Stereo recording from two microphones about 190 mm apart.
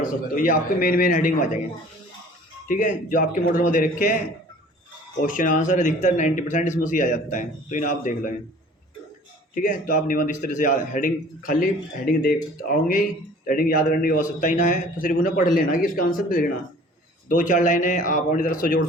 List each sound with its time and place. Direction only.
0.0 s a man's voice: 45° left (ahead or behind)
2.6 s a man's voice: 45° left (ahead or behind)
5.2 s a man's voice: 45° left (ahead or behind)
9.6 s a man's voice: 45° left (ahead or behind)